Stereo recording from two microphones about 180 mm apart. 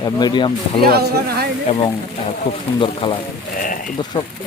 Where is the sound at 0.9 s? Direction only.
60° right (ahead or behind).